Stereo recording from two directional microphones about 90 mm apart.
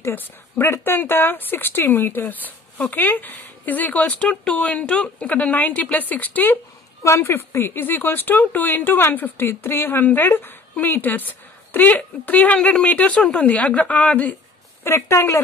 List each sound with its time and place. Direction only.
0.0 s speech: 30° left (ahead or behind)
7.0 s speech: 30° left (ahead or behind); by 14.3 s 15° left (ahead or behind)
14.8 s speech: 25° left (ahead or behind)